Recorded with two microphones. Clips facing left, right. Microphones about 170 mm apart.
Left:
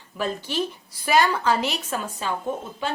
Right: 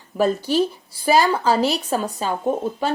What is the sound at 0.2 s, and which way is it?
A woman's voice, 35° right (ahead or behind).